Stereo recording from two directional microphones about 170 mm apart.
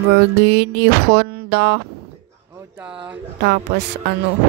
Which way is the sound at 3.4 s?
85° right.